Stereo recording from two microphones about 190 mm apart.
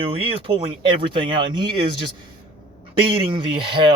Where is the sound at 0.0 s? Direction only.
30° right (ahead or behind).